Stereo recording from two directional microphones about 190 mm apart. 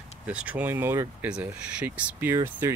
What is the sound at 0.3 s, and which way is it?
Speech, 5° right (ahead or behind).